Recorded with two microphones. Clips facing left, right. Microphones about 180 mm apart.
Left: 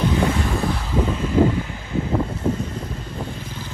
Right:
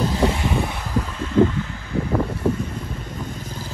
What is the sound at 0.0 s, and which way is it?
Vehicle, 35° right (ahead or behind).